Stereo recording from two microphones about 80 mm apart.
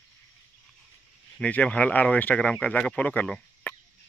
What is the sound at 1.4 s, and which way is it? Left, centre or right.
Speech, centre.